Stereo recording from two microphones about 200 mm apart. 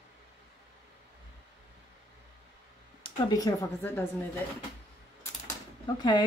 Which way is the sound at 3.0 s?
20° left (ahead or behind).